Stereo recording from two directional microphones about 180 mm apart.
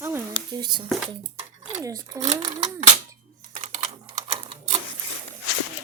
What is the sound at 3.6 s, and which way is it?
Typing, 35° right (ahead or behind).